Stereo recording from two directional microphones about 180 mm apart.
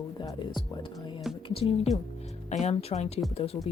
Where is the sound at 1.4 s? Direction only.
35° left (ahead or behind).